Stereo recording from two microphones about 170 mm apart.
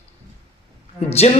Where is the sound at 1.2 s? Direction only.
40° left (ahead or behind).